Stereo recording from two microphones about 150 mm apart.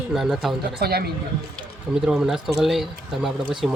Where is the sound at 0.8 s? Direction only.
90° right.